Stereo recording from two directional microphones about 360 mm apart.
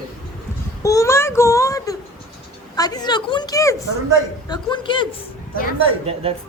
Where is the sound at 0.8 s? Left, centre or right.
Centre.